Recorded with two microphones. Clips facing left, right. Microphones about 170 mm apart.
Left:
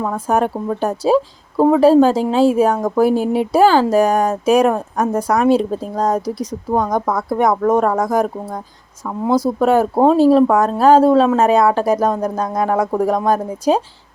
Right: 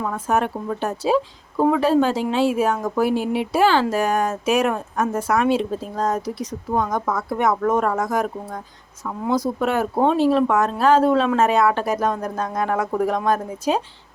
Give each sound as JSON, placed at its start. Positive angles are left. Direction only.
{"t": 0.0, "sound": "speech", "side_deg": 35}